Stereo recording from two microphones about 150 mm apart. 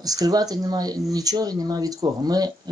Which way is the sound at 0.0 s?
25° right (ahead or behind).